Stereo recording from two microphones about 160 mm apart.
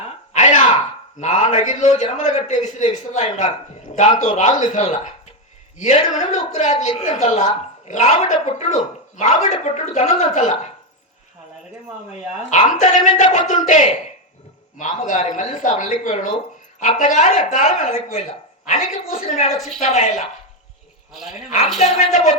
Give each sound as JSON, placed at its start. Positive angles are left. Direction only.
{"t": 0.3, "sound": "a sound", "side_deg": 50}
{"t": 1.2, "sound": "speech", "side_deg": 50}
{"t": 12.4, "sound": "a woman's voice", "side_deg": 50}
{"t": 19.5, "sound": "speech", "side_deg": 0}
{"t": 19.8, "sound": "speech", "side_deg": 45}
{"t": 21.1, "sound": "speech", "side_deg": 0}
{"t": 21.9, "sound": "speech", "side_deg": 50}